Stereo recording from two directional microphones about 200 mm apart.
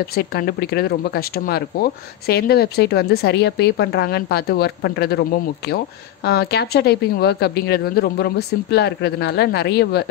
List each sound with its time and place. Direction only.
0.1 s speech: 50° left (ahead or behind)
6.2 s speech: 55° left (ahead or behind)